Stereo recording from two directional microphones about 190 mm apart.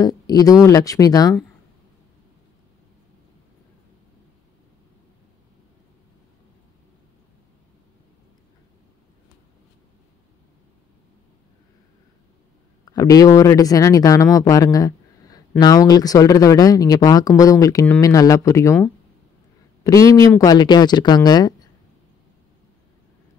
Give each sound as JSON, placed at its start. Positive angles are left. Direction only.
{"t": 0.0, "sound": "speech", "side_deg": 20}
{"t": 12.8, "sound": "speech", "side_deg": 20}
{"t": 19.8, "sound": "speech", "side_deg": 15}